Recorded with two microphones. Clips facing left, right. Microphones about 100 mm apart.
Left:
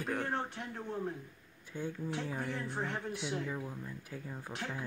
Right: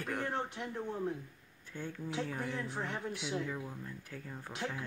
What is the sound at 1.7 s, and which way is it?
Speech, 15° left (ahead or behind).